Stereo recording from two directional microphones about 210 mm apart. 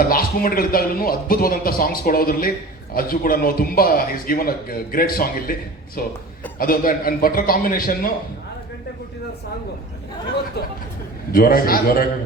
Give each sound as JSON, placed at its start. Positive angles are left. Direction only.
{"t": 0.0, "sound": "a man's voice", "side_deg": 45}
{"t": 11.3, "sound": "a man's voice", "side_deg": 45}